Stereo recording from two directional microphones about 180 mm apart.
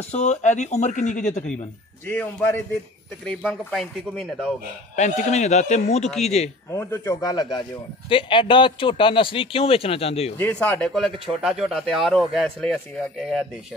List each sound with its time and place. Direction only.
0.1 s speech: 40° left (ahead or behind)
2.0 s a man's voice: 10° left (ahead or behind)
3.4 s speech: centre (ahead or behind)
4.9 s speech: 40° left (ahead or behind)
6.7 s a man's voice: 15° left (ahead or behind); by 10.3 s 35° left (ahead or behind)
10.3 s speech: 10° left (ahead or behind)